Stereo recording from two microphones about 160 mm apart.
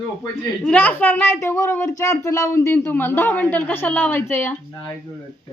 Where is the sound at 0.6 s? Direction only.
10° left (ahead or behind).